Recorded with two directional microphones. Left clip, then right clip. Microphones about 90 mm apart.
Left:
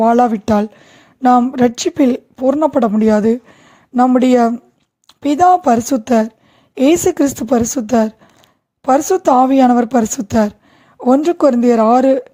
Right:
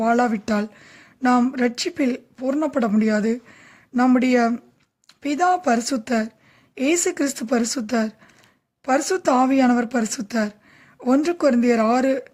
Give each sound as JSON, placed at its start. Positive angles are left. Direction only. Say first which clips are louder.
{"t": 0.0, "sound": "speech", "louder": "left 8 dB", "side_deg": 50}